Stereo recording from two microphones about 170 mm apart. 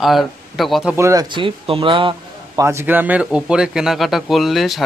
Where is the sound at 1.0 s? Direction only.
20° right (ahead or behind).